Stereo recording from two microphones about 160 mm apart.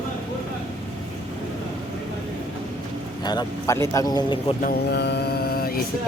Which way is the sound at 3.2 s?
25° left (ahead or behind).